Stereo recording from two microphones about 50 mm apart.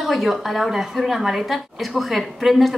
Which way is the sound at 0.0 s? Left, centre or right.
Centre.